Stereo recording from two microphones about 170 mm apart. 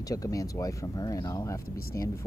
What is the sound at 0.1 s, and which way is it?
Speech, 20° left (ahead or behind).